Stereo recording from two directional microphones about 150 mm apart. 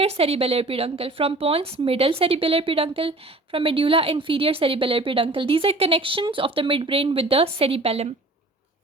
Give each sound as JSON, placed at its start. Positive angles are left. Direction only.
{"t": 0.0, "sound": "a woman's voice", "side_deg": -45}